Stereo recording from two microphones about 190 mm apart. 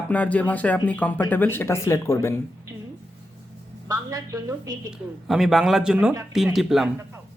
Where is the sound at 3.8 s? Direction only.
20° right (ahead or behind).